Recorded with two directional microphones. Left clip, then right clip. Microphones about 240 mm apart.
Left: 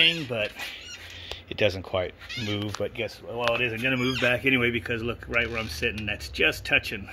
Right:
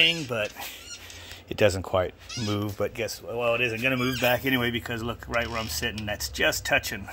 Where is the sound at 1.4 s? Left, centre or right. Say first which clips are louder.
Right 3 dB; centre.